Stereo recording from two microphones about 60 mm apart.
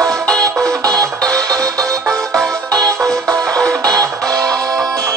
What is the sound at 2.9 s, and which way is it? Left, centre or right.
Music, centre.